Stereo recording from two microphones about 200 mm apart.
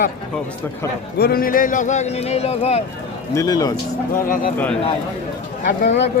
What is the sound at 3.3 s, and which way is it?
Speech, 15° left (ahead or behind).